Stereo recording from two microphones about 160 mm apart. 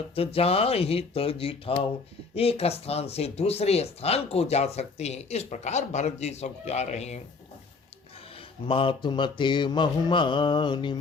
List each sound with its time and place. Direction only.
0.3 s speech: 40° left (ahead or behind)
8.6 s mantra: 35° left (ahead or behind)